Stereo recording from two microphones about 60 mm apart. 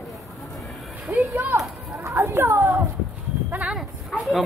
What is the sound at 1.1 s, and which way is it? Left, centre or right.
Speech, right.